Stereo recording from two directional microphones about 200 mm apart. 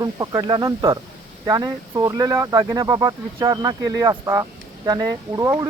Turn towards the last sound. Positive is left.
turn(degrees=-15)  # may be behind; listen again after turning